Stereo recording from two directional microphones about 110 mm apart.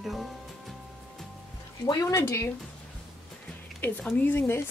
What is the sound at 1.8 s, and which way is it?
Speech, 30° left (ahead or behind).